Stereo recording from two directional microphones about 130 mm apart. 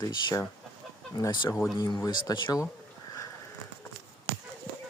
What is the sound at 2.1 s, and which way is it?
Speech, 35° left (ahead or behind).